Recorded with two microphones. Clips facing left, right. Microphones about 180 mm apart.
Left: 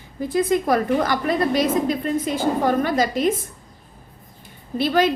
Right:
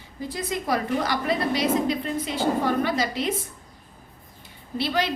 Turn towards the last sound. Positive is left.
turn(degrees=50)  # may be behind; listen again after turning